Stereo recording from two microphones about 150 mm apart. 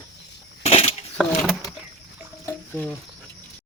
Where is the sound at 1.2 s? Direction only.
Centre (ahead or behind).